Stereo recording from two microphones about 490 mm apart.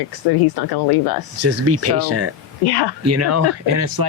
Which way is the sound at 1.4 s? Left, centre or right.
Right.